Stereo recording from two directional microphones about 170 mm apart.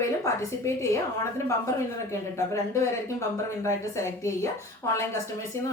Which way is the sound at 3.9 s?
15° left (ahead or behind).